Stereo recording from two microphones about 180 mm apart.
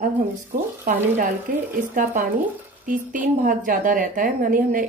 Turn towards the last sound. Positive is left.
turn(degrees=-45)  # may be behind; listen again after turning